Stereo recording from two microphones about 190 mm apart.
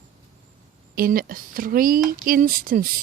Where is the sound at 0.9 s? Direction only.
50° right (ahead or behind).